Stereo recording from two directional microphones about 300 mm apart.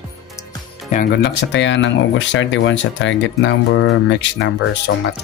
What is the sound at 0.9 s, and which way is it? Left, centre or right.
Speech, left.